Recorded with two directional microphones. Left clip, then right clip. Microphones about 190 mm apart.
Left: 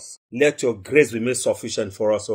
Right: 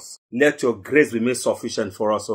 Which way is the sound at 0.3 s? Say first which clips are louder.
Right 1 dB; 35° left (ahead or behind).